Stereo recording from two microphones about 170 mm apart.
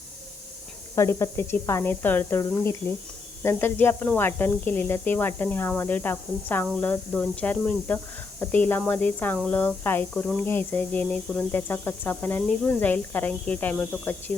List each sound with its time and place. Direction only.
0.9 s speech: 15° left (ahead or behind)